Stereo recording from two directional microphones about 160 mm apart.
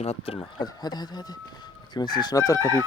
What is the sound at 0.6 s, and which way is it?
Speech, 25° left (ahead or behind).